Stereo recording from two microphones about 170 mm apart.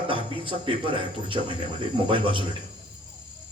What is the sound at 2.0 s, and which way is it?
Speech, 30° right (ahead or behind).